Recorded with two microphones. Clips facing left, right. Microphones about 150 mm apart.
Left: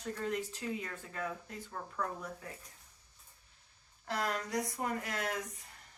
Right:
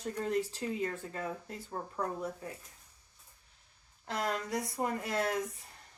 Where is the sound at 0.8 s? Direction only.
30° right (ahead or behind).